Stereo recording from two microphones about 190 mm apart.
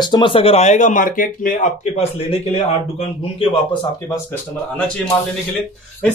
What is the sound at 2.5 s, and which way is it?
A man's voice, 30° left (ahead or behind).